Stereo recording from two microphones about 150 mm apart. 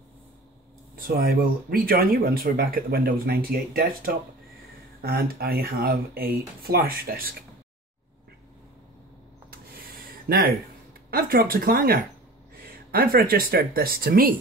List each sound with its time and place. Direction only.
0.9 s speech: 75° right (ahead or behind)
9.8 s a sound: 85° right
11.1 s speech: 80° right